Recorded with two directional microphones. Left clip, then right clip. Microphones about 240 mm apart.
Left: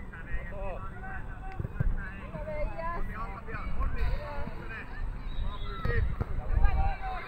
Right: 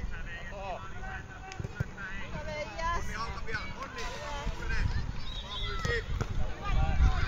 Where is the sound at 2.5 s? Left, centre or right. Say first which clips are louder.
Right 2 dB; right.